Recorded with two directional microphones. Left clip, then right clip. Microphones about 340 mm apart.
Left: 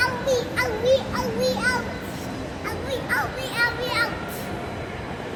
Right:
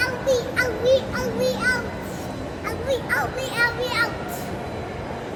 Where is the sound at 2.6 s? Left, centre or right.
Centre.